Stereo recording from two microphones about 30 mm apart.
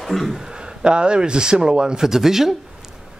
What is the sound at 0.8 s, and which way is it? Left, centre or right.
Speech, right.